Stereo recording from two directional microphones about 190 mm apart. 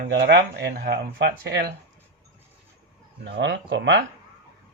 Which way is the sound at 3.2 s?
65° right (ahead or behind).